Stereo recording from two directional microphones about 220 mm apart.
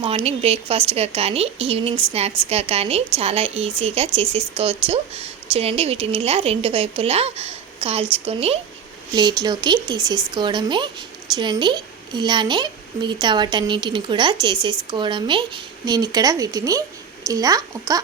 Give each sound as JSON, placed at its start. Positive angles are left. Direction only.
{"t": 0.0, "sound": "speech", "side_deg": -25}